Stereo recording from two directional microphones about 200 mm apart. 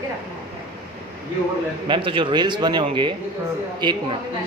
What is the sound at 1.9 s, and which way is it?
A man's voice, 25° right (ahead or behind).